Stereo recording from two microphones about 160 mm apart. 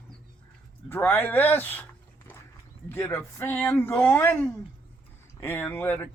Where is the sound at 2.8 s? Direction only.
15° left (ahead or behind).